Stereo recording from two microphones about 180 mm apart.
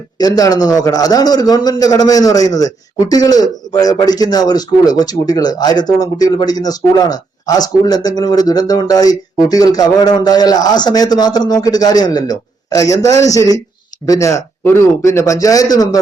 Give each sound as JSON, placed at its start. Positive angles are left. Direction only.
{"t": 0.2, "sound": "a man's voice", "side_deg": 20}